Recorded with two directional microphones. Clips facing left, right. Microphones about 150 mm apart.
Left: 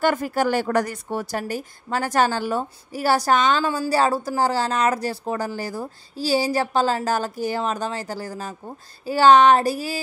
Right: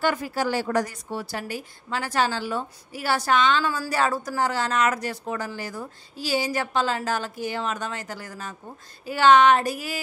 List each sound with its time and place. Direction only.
0.0 s a woman's voice: 50° left (ahead or behind)
1.3 s a woman's voice: 45° left (ahead or behind)
3.6 s speech: 30° left (ahead or behind)